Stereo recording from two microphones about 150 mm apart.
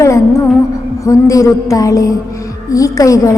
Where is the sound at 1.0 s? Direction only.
20° left (ahead or behind).